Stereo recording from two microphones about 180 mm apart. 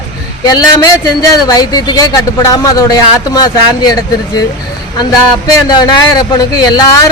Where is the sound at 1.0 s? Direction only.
20° left (ahead or behind).